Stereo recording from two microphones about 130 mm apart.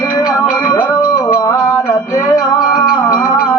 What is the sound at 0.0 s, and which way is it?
Music, 35° left (ahead or behind).